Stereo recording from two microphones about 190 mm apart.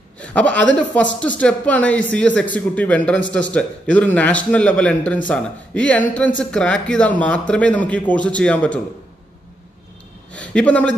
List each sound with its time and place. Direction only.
0.2 s a man's voice: 5° left (ahead or behind)
10.3 s a man's voice: 5° left (ahead or behind)